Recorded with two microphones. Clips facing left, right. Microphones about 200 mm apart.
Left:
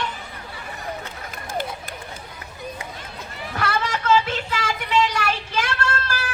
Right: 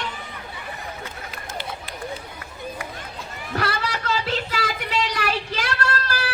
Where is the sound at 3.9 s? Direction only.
35° right (ahead or behind).